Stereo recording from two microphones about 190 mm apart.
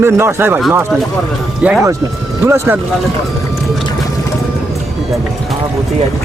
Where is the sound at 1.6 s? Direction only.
10° right (ahead or behind).